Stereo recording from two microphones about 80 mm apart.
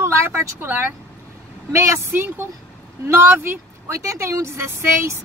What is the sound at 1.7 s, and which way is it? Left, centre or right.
Speech, right.